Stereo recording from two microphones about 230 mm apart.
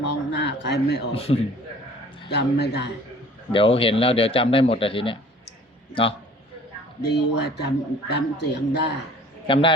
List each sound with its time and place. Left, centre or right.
0.3 s speech: left
1.1 s a man's voice: left
2.3 s speech: left
3.5 s a man's voice: left
7.0 s speech: left
9.5 s a man's voice: left